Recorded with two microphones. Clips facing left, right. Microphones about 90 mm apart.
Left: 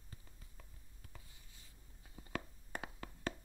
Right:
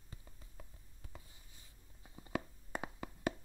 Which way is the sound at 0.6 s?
15° right (ahead or behind).